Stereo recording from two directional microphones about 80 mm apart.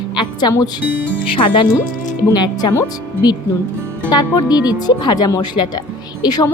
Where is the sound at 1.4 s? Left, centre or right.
Left.